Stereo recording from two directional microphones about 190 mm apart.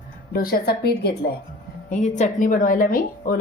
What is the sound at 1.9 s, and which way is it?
A woman's voice, 40° left (ahead or behind).